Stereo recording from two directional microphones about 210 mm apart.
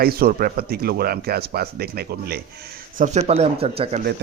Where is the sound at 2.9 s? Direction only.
35° right (ahead or behind).